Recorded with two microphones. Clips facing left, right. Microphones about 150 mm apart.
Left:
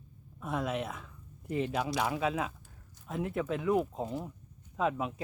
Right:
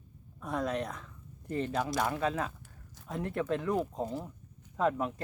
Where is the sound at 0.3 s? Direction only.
5° left (ahead or behind).